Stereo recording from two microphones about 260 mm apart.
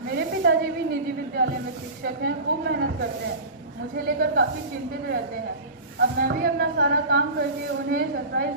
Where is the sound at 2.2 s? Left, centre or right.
Right.